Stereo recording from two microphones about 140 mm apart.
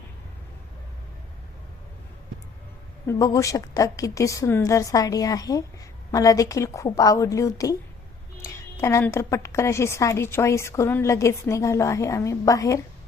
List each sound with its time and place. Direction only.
3.1 s a woman's voice: 25° left (ahead or behind)
8.8 s a woman's voice: 20° left (ahead or behind)